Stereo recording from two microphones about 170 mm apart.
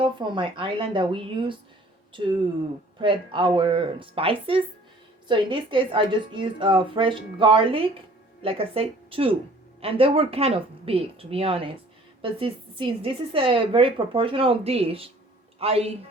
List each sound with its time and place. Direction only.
0.0 s a woman's voice: 30° right (ahead or behind)
3.0 s a woman's voice: 30° right (ahead or behind)